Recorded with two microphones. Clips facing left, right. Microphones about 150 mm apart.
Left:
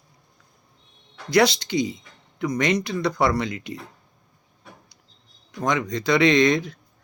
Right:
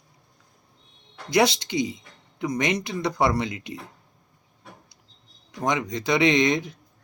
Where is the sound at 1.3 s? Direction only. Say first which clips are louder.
Left 2 dB; 20° right (ahead or behind).